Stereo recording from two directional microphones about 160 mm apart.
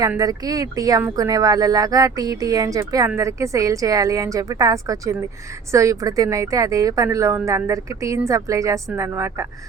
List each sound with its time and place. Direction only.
0.2 s a woman's voice: 20° right (ahead or behind)